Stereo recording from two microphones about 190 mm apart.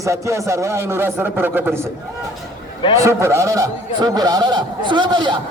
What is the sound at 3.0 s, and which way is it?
A man's voice, 15° right (ahead or behind).